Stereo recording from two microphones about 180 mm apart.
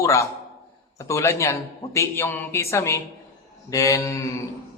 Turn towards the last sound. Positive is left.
turn(degrees=15)  # may be behind; listen again after turning